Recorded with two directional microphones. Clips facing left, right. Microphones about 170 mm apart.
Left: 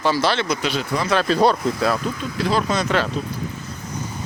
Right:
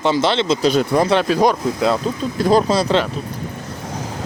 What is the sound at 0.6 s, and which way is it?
Speech, 40° right (ahead or behind).